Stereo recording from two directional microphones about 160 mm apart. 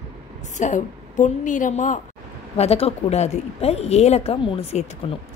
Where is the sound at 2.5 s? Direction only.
40° left (ahead or behind).